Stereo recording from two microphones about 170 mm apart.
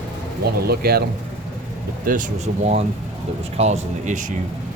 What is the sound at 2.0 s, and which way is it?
Speech, 45° right (ahead or behind).